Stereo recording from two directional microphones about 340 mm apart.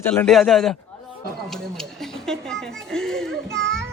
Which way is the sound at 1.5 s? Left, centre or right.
Centre.